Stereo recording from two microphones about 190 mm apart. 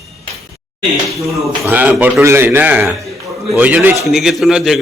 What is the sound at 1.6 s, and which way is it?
A man's voice, 10° right (ahead or behind).